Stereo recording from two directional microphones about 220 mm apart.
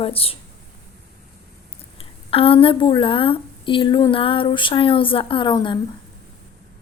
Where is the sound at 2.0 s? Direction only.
25° left (ahead or behind).